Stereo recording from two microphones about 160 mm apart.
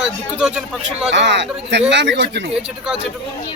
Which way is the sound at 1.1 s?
90° right.